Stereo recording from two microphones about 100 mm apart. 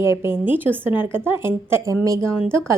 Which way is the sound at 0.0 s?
25° right (ahead or behind).